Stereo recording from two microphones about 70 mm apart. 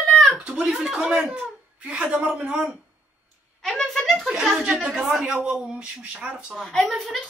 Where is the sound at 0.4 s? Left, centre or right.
Centre.